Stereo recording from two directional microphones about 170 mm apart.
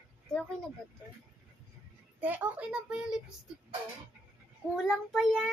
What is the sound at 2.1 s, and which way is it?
A woman's voice, 10° right (ahead or behind).